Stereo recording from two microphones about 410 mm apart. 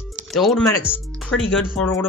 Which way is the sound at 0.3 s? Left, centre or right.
Centre.